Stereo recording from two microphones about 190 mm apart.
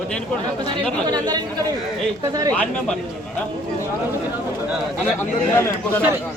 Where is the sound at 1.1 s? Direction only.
20° right (ahead or behind).